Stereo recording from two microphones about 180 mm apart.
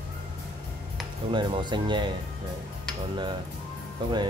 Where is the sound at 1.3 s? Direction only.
25° right (ahead or behind).